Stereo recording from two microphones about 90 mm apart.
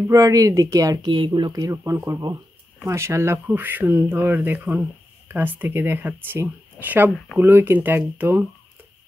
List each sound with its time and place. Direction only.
0.0 s speech: 35° right (ahead or behind)
1.0 s speech: 65° right (ahead or behind)
1.5 s speech: 40° right (ahead or behind)
3.4 s speech: 20° right (ahead or behind)